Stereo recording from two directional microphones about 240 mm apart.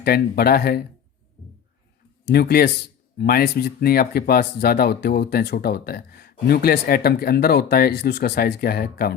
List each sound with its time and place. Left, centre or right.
0.0 s speech: left
2.2 s speech: left